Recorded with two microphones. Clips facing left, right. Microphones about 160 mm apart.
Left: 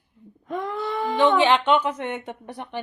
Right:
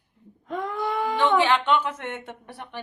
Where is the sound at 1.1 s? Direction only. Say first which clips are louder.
Left 3 dB; 15° left (ahead or behind).